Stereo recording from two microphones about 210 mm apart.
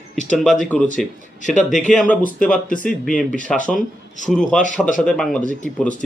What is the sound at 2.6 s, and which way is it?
Speech, 40° left (ahead or behind).